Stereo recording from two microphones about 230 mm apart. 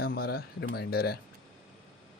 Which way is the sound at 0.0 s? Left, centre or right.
Left.